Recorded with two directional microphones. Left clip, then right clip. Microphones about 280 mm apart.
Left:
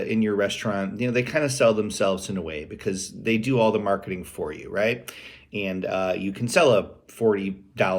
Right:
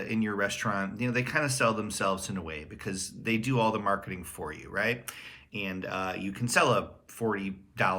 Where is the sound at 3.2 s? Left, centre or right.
Centre.